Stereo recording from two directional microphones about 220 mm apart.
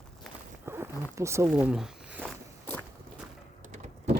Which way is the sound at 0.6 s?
10° right (ahead or behind).